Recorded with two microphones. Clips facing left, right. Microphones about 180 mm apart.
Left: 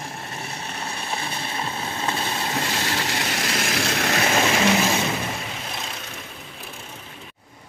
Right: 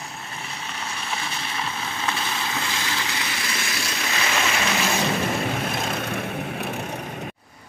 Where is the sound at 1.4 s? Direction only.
30° left (ahead or behind); by 4.3 s 55° left (ahead or behind).